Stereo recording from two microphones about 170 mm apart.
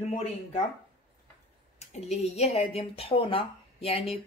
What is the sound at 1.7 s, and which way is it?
Speech, 40° left (ahead or behind).